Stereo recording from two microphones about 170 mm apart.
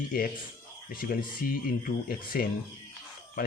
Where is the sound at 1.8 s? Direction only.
60° left (ahead or behind).